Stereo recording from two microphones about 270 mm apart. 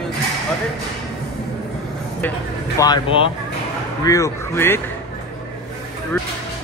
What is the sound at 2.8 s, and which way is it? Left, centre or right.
A man's voice, centre.